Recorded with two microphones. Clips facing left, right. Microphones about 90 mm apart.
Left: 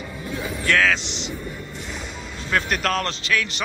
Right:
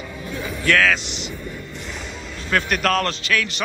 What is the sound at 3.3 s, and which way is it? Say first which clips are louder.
Speech: right 1 dB; 10° left (ahead or behind).